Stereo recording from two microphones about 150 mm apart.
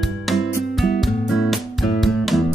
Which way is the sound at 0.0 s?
Centre (ahead or behind).